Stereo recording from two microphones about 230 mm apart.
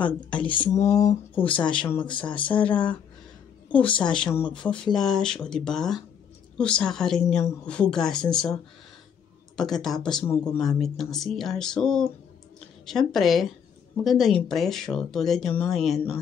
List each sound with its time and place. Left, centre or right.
0.0 s a woman's voice: centre
2.0 s speech: left
2.4 s speech: centre
4.0 s a woman's voice: centre
9.6 s a woman's voice: centre
10.8 s a woman's voice: centre